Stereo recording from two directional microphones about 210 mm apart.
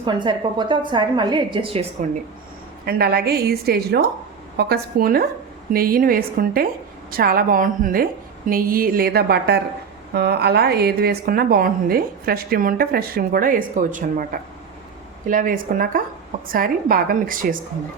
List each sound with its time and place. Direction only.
0.0 s a woman's voice: 20° right (ahead or behind)
2.8 s a woman's voice: 50° right (ahead or behind)
15.3 s a woman's voice: 40° right (ahead or behind)